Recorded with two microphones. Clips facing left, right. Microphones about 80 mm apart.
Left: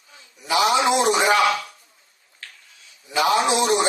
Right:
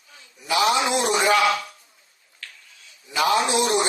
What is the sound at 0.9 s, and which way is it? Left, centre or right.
Speech, left.